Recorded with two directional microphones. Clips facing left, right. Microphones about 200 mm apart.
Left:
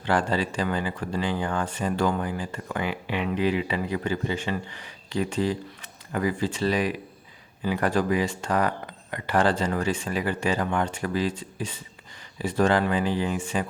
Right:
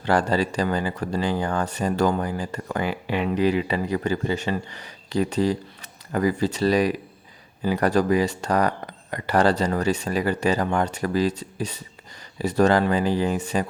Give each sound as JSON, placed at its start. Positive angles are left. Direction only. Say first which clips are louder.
{"t": 0.0, "sound": "speech", "louder": "right 3 dB", "side_deg": -40}